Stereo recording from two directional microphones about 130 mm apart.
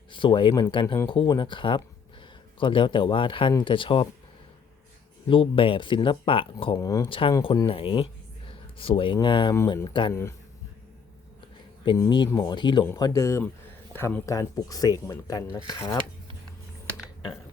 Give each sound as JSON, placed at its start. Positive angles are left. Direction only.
{"t": 0.1, "sound": "speech", "side_deg": 40}
{"t": 5.3, "sound": "speech", "side_deg": 45}
{"t": 6.7, "sound": "speech", "side_deg": 25}
{"t": 7.1, "sound": "speech", "side_deg": 40}
{"t": 10.1, "sound": "speech", "side_deg": 20}
{"t": 11.9, "sound": "speech", "side_deg": 35}